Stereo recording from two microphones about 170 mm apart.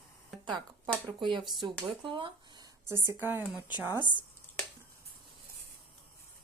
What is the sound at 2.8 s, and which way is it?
Speech, 15° right (ahead or behind).